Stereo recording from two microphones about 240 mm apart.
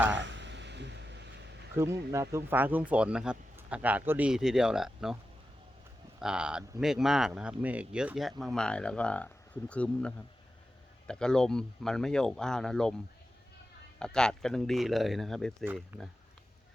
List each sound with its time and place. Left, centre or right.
0.1 s a sound: right
1.7 s speech: centre
6.1 s speech: centre
14.0 s speech: centre
15.6 s speech: centre